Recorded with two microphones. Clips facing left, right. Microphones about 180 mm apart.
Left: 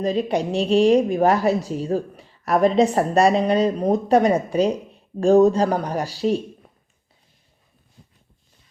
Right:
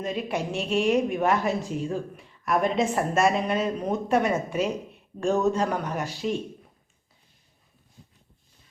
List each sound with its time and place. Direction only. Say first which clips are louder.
0.0 s a woman's voice: left 7 dB; 35° left (ahead or behind)